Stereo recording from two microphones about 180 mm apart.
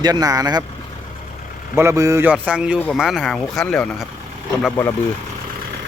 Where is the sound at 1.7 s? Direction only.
15° right (ahead or behind).